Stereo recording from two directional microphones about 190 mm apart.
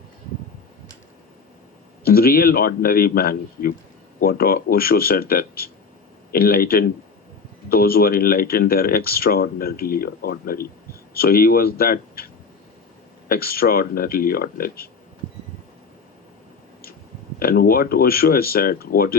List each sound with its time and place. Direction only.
2.0 s speech: 50° left (ahead or behind)
17.4 s speech: 55° left (ahead or behind)